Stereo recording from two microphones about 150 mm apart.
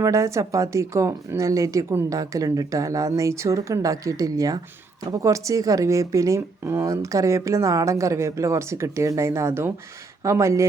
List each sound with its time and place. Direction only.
0.0 s speech: 20° right (ahead or behind)